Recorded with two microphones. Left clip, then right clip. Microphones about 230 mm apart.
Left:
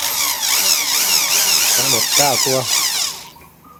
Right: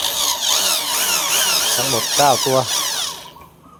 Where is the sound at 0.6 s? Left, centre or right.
Left.